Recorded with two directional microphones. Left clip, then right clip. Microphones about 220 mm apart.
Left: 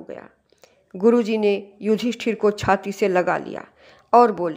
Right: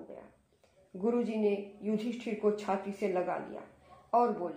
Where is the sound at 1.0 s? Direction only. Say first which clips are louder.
Left 13 dB; 40° left (ahead or behind).